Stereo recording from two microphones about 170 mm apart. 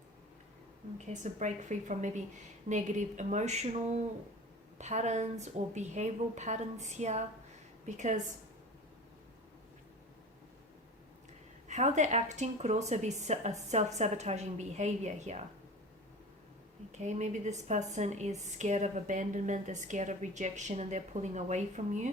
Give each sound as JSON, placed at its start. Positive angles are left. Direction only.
{"t": 1.1, "sound": "a woman's voice", "side_deg": -45}
{"t": 11.7, "sound": "a woman's voice", "side_deg": -45}
{"t": 16.9, "sound": "a woman's voice", "side_deg": -45}